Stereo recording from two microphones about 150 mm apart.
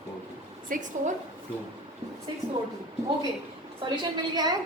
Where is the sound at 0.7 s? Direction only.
60° right (ahead or behind).